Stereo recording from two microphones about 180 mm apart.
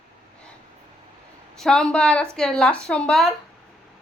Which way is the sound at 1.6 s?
5° left (ahead or behind).